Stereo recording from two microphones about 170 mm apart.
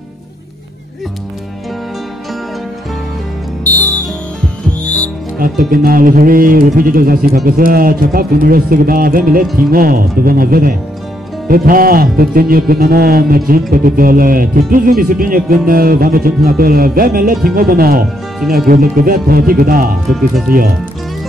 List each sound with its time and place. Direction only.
3.6 s music: 10° left (ahead or behind)
5.4 s speech: 55° right (ahead or behind)
20.1 s speech: centre (ahead or behind)